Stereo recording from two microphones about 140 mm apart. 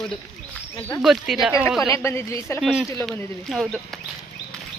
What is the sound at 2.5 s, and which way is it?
Speech, centre (ahead or behind).